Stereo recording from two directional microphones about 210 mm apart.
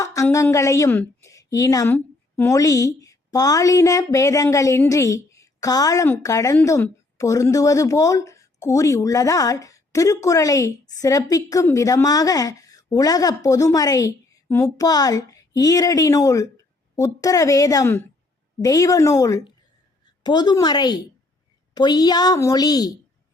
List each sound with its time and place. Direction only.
0.0 s a woman's voice: 15° left (ahead or behind)